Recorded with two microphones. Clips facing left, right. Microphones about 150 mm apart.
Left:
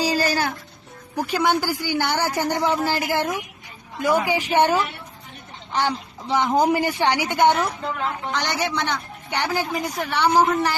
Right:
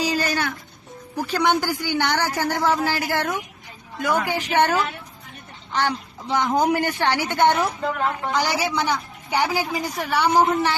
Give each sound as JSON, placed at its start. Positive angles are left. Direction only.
{"t": 0.0, "sound": "music", "side_deg": 35}
{"t": 1.1, "sound": "a man's voice", "side_deg": 10}
{"t": 7.4, "sound": "a woman's voice", "side_deg": 0}